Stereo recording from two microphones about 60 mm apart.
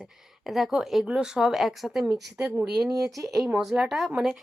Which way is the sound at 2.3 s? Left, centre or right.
Right.